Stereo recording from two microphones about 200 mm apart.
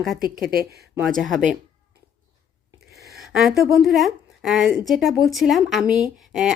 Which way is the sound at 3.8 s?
Centre (ahead or behind).